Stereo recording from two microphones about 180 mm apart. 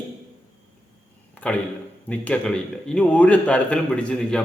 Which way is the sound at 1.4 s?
5° left (ahead or behind).